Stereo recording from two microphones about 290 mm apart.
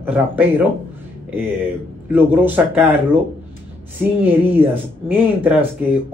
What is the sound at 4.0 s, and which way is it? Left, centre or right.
A man's voice, centre.